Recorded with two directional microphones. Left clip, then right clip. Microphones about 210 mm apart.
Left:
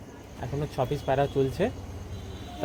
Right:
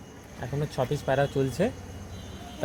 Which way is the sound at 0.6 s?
40° right (ahead or behind).